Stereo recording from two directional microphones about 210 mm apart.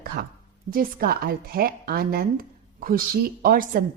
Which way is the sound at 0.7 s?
45° right (ahead or behind).